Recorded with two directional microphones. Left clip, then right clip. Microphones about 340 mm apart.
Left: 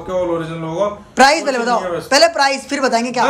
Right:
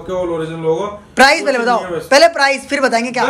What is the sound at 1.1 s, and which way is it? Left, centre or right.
Speech, centre.